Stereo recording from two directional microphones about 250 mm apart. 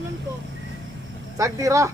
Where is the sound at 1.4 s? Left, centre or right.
Centre.